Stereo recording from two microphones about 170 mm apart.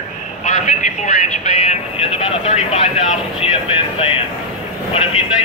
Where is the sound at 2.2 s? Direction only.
35° left (ahead or behind).